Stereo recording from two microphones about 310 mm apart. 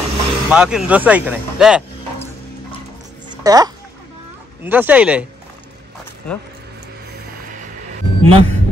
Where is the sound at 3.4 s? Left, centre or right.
Centre.